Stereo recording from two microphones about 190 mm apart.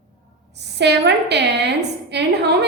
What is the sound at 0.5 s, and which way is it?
A woman's voice, 60° right (ahead or behind).